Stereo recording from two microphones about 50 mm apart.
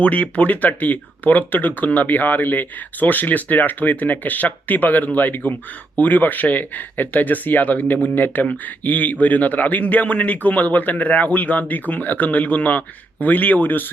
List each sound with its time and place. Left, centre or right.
0.0 s speech: left